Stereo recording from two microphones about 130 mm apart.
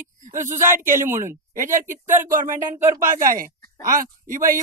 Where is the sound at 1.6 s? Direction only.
90° right.